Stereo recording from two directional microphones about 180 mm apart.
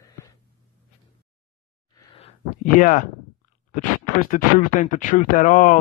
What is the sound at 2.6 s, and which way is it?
Speech, 45° left (ahead or behind).